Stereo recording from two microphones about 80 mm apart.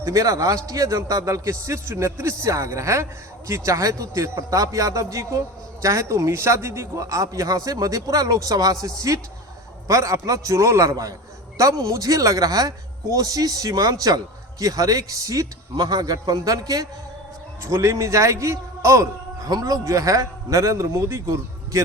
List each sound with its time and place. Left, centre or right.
0.0 s speech: right
15.7 s speech: right